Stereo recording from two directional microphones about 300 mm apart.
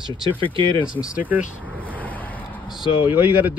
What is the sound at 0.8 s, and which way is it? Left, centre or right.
Speech, centre.